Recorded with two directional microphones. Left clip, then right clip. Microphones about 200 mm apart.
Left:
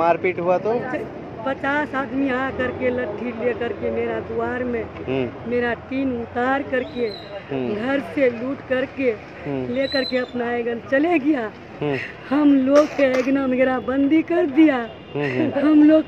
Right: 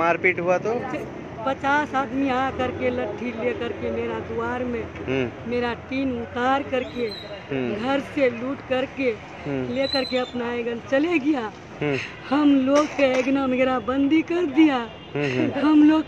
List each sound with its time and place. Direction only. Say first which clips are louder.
0.0 s speech: left 2 dB; 5° left (ahead or behind)
12.7 s speech: left 5 dB; 55° left (ahead or behind)
13.3 s speech: left 2 dB; 5° left (ahead or behind)